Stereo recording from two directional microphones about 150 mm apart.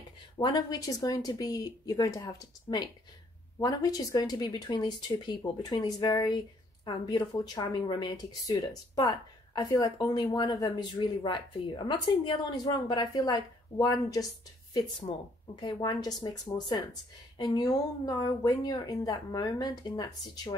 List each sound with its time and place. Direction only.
0.4 s speech: 25° left (ahead or behind)
15.1 s speech: 35° left (ahead or behind)
15.6 s speech: 25° left (ahead or behind)